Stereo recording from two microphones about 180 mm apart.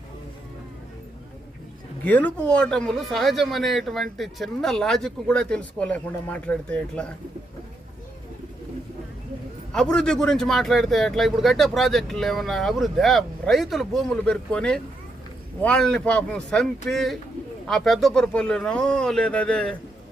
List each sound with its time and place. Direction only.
2.0 s speech: 10° left (ahead or behind)
9.7 s speech: 5° left (ahead or behind)